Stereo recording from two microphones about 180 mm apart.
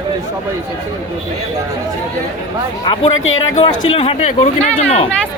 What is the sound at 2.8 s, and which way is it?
Speech, 25° left (ahead or behind).